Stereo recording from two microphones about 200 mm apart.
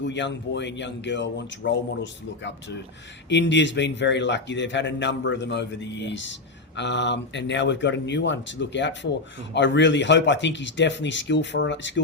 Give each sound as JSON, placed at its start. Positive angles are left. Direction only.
{"t": 0.0, "sound": "speech", "side_deg": 60}